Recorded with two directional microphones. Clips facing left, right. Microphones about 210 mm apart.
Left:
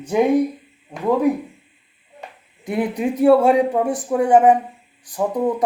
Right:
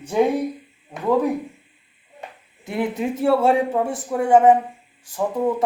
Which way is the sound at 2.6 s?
20° left (ahead or behind).